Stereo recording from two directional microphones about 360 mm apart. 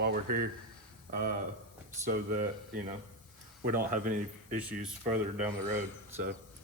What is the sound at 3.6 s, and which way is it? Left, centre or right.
Speech, right.